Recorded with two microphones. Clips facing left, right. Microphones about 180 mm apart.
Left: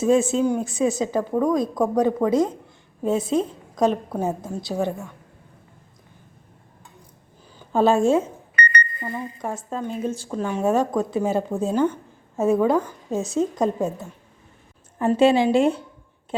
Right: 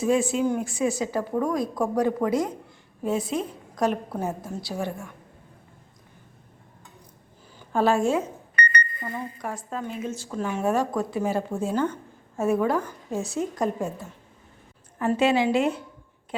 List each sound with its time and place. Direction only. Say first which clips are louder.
0.0 s a woman's voice: left 4 dB; 25° left (ahead or behind)
7.7 s a woman's voice: left 4 dB; 25° left (ahead or behind)
9.4 s a woman's voice: left 3 dB; 25° left (ahead or behind)